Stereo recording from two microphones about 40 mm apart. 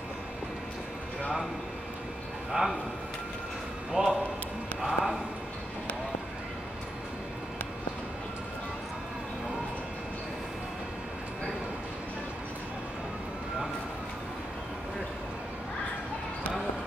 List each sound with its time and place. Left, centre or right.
2.5 s speech: right
3.9 s speech: centre